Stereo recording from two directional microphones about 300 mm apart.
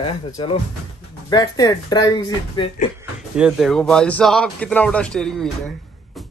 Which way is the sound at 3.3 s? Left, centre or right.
Centre.